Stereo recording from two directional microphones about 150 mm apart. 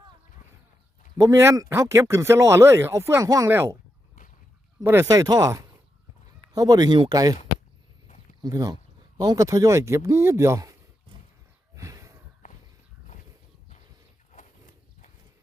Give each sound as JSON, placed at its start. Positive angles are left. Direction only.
{"t": 1.2, "sound": "speech", "side_deg": -20}
{"t": 4.8, "sound": "speech", "side_deg": -20}
{"t": 8.0, "sound": "a sound", "side_deg": 60}
{"t": 8.4, "sound": "speech", "side_deg": -25}
{"t": 11.7, "sound": "a sound", "side_deg": -20}
{"t": 14.3, "sound": "horse", "side_deg": 60}